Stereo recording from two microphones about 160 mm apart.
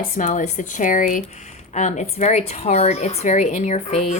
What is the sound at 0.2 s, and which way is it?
A woman's voice, 50° left (ahead or behind).